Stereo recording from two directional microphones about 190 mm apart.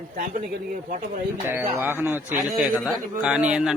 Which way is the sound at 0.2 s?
45° right (ahead or behind).